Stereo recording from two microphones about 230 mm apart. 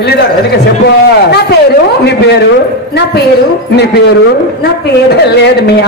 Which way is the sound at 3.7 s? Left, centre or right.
Left.